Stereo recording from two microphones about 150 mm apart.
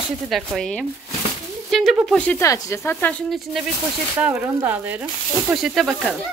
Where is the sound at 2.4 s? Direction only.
20° left (ahead or behind).